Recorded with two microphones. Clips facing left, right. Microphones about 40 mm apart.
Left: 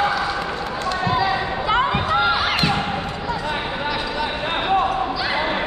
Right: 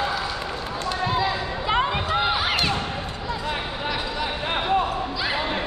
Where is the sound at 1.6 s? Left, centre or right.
Centre.